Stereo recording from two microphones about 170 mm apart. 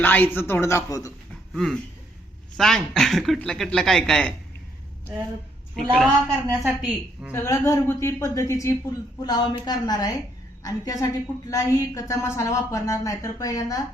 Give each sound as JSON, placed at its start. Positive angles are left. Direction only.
{"t": 0.0, "sound": "a woman's voice", "side_deg": 10}
{"t": 1.5, "sound": "speech", "side_deg": 0}
{"t": 5.7, "sound": "speech", "side_deg": 5}
{"t": 7.3, "sound": "a woman's voice", "side_deg": 15}